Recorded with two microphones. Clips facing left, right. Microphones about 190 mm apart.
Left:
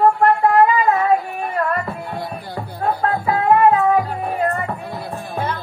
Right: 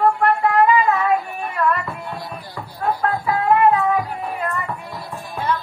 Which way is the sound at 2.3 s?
40° left (ahead or behind).